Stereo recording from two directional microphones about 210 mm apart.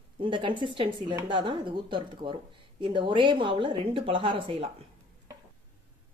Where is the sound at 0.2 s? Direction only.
25° right (ahead or behind).